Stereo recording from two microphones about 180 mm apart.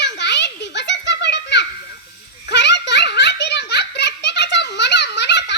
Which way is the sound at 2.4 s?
75° left (ahead or behind).